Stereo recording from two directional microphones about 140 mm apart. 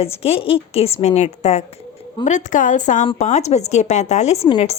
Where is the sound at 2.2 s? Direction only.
65° left (ahead or behind).